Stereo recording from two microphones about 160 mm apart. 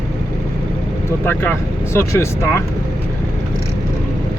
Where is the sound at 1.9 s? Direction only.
15° left (ahead or behind).